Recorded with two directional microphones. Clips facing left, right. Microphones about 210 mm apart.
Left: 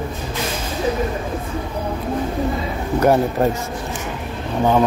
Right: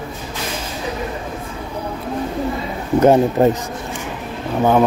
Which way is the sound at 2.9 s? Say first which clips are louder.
Right 4 dB; 20° right (ahead or behind).